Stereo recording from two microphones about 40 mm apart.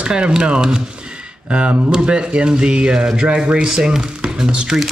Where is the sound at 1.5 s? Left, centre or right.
Right.